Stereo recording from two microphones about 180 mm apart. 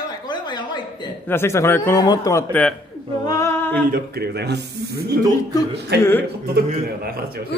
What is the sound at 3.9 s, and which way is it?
Speech, 60° right (ahead or behind).